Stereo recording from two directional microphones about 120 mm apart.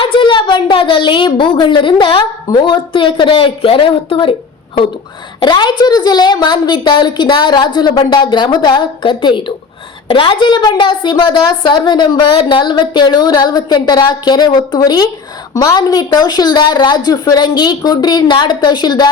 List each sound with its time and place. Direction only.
0.0 s a woman's voice: 45° left (ahead or behind)
5.4 s a woman's voice: 40° left (ahead or behind)